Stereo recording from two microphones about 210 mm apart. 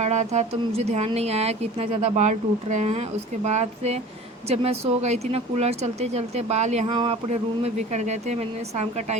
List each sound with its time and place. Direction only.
0.0 s a woman's voice: 35° right (ahead or behind)